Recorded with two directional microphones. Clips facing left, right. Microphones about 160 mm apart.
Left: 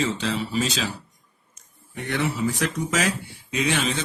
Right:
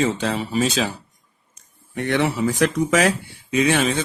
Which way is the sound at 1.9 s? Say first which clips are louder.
Right 5 dB; 65° right (ahead or behind).